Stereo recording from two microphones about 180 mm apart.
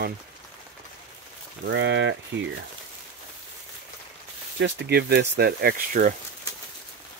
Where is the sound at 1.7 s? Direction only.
85° right.